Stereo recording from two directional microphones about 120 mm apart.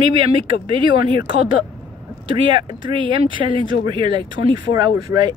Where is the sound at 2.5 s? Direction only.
45° right (ahead or behind).